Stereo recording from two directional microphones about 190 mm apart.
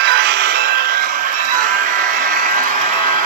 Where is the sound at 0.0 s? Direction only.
60° right (ahead or behind).